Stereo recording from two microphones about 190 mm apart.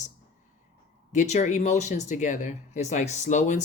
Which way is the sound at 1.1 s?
40° left (ahead or behind).